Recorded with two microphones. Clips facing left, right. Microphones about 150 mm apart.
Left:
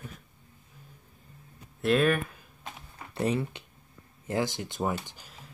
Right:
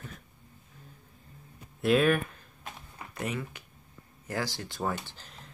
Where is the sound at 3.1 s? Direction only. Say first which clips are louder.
Left 7 dB; 30° left (ahead or behind); by 5.5 s 5° left (ahead or behind).